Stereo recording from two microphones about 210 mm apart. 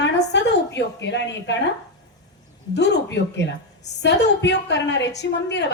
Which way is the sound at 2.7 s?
55° left (ahead or behind).